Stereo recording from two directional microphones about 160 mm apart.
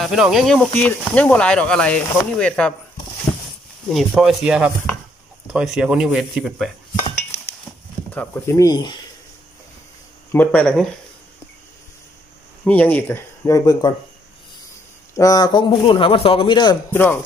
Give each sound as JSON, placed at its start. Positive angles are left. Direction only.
{"t": 0.0, "sound": "speech", "side_deg": 0}
{"t": 3.3, "sound": "a sound", "side_deg": 10}
{"t": 3.9, "sound": "speech", "side_deg": 0}
{"t": 8.1, "sound": "a man's voice", "side_deg": 15}
{"t": 10.3, "sound": "speech", "side_deg": 10}
{"t": 12.6, "sound": "speech", "side_deg": 10}
{"t": 15.1, "sound": "a man's voice", "side_deg": 20}
{"t": 16.9, "sound": "speech", "side_deg": 15}